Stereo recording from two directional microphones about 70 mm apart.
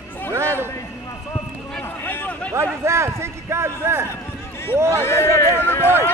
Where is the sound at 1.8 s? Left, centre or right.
Left.